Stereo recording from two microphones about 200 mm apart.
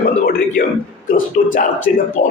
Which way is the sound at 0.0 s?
45° left (ahead or behind).